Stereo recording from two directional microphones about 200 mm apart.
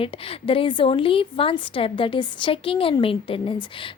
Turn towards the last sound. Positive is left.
turn(degrees=25)  # may be behind; listen again after turning